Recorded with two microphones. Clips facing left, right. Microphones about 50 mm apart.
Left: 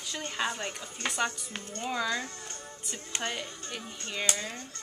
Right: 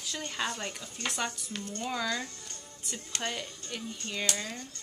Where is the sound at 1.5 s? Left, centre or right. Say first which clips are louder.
Right 1 dB; left.